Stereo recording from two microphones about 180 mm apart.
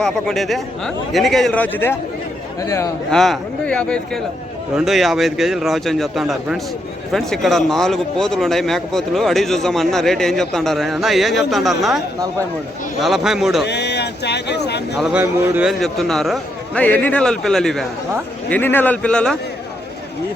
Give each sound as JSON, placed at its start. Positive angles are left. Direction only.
{"t": 0.0, "sound": "a man's voice", "side_deg": 0}
{"t": 3.1, "sound": "a man's voice", "side_deg": 5}
{"t": 13.7, "sound": "speech", "side_deg": 70}
{"t": 14.9, "sound": "speech", "side_deg": -5}
{"t": 15.8, "sound": "a man's voice", "side_deg": 0}